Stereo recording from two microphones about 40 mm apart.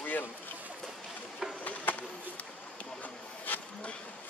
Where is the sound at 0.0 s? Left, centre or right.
Left.